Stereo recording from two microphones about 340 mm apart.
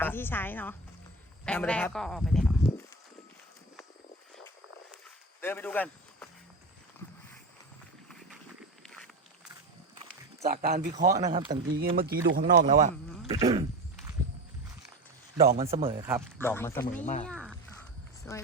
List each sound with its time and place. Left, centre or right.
0.0 s a woman's voice: centre
5.4 s speech: centre
10.4 s speech: right
12.6 s a sound: centre
15.4 s speech: centre
16.4 s a man's voice: centre